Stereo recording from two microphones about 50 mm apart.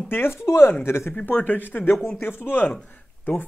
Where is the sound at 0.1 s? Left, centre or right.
Left.